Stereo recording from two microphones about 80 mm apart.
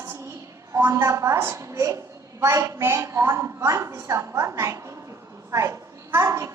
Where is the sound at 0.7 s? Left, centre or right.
Right.